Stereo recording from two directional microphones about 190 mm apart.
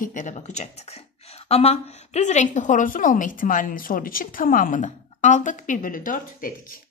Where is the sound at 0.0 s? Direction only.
40° left (ahead or behind).